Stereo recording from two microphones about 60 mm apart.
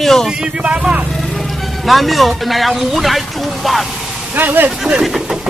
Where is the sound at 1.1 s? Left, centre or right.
Centre.